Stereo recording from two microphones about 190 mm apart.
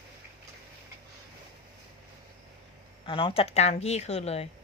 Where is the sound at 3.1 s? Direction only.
25° left (ahead or behind).